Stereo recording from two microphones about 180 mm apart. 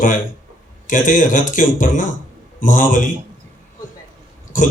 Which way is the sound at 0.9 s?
45° left (ahead or behind).